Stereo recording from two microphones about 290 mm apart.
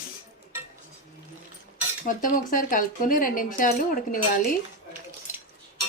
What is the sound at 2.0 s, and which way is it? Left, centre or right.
Speech, left.